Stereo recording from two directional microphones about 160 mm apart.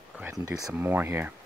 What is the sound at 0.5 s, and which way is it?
Speech, 5° right (ahead or behind).